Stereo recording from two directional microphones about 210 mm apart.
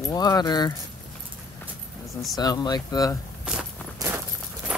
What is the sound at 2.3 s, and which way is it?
Speech, 20° left (ahead or behind).